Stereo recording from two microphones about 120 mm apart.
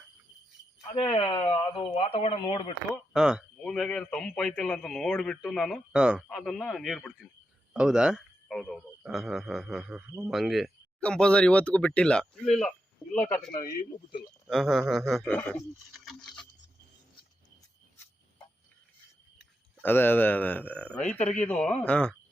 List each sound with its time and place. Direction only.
0.9 s speech: 50° left (ahead or behind)
2.0 s speech: 55° left (ahead or behind)
3.1 s a man's voice: 5° right (ahead or behind)
6.2 s a man's voice: centre (ahead or behind)
14.4 s a man's voice: centre (ahead or behind)
15.3 s speech: 10° left (ahead or behind)
15.5 s a man's voice: centre (ahead or behind)
19.8 s speech: 15° left (ahead or behind)